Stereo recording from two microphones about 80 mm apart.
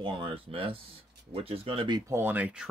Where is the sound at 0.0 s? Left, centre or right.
Right.